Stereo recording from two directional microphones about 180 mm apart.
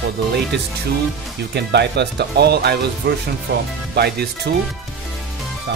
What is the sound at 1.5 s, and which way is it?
Speech, 70° right (ahead or behind).